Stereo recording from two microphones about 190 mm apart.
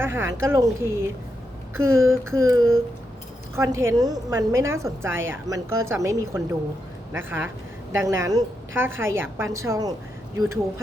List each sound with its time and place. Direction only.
0.0 s a woman's voice: 10° right (ahead or behind)